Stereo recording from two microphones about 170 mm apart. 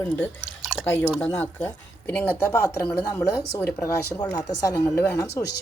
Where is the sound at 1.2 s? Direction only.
10° left (ahead or behind).